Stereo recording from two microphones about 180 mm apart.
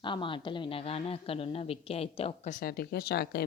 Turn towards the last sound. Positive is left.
turn(degrees=60)  # may be behind; listen again after turning